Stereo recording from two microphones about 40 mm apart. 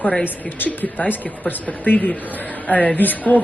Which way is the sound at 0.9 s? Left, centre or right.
Left.